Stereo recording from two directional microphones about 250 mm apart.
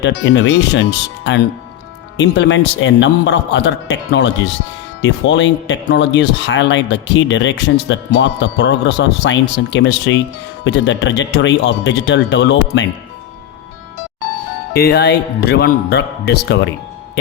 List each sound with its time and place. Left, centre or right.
0.0 s speech: left
14.7 s speech: left